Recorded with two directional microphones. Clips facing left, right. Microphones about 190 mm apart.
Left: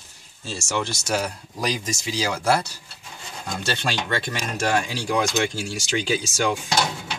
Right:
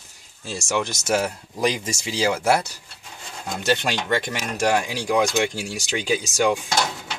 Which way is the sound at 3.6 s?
15° right (ahead or behind).